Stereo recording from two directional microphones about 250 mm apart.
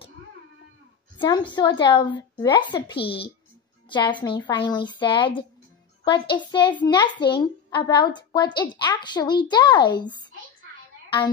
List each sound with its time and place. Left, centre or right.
1.1 s a woman's voice: centre
3.9 s a woman's voice: centre